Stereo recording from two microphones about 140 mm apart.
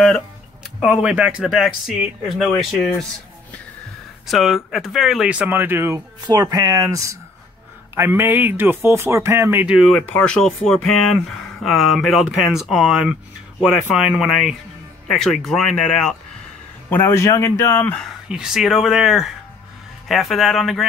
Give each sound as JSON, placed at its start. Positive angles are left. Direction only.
{"t": 0.7, "sound": "speech", "side_deg": -5}
{"t": 4.3, "sound": "speech", "side_deg": 0}
{"t": 9.9, "sound": "speech", "side_deg": 10}
{"t": 16.9, "sound": "speech", "side_deg": 15}
{"t": 18.3, "sound": "speech", "side_deg": -5}